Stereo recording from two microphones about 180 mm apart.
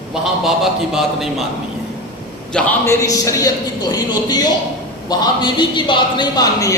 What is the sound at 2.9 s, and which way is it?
A man's voice, 20° left (ahead or behind).